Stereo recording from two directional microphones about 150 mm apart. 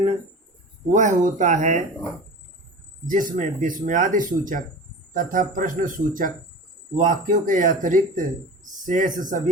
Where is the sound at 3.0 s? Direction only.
60° right (ahead or behind).